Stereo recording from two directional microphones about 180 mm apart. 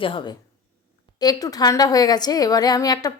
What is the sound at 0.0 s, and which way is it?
Speech, 25° left (ahead or behind).